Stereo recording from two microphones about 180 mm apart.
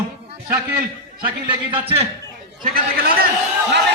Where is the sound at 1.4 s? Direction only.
30° right (ahead or behind).